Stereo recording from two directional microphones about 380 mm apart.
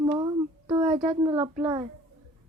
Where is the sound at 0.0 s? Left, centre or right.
Centre.